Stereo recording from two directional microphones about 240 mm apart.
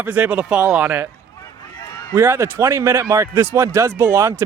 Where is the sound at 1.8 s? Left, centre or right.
Centre.